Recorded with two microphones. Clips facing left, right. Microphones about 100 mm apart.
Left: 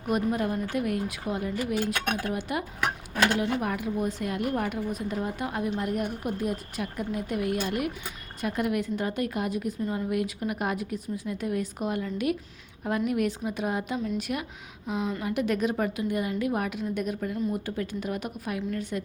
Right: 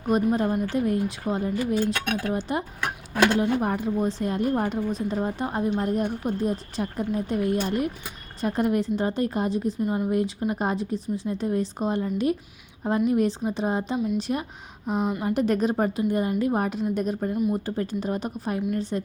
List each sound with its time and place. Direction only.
0.1 s a woman's voice: 30° right (ahead or behind)
10.1 s a woman's voice: 30° right (ahead or behind)
14.8 s a woman's voice: 50° right (ahead or behind)
15.2 s a woman's voice: 35° right (ahead or behind)